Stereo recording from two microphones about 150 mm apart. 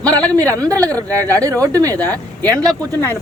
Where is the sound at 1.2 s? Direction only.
20° right (ahead or behind).